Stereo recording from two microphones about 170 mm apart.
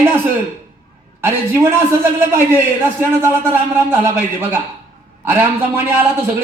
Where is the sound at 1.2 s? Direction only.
15° right (ahead or behind).